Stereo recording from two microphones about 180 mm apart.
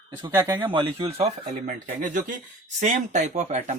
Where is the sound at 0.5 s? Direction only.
25° right (ahead or behind).